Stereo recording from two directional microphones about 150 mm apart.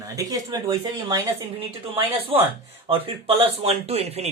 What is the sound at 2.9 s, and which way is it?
Speech, 40° right (ahead or behind).